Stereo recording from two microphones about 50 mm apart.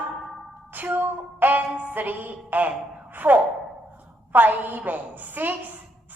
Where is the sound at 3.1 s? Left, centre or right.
Right.